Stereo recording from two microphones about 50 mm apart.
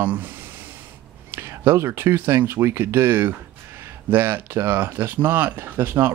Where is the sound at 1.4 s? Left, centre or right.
Right.